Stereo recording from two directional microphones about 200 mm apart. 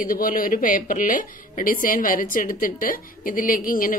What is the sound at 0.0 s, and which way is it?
A woman's voice, 45° left (ahead or behind).